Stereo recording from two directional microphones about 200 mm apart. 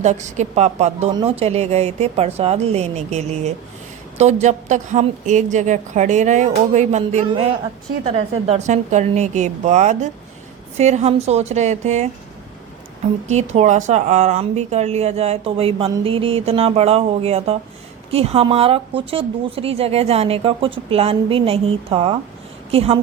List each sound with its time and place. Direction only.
0.0 s a woman's voice: 35° right (ahead or behind)
13.2 s a woman's voice: 35° right (ahead or behind)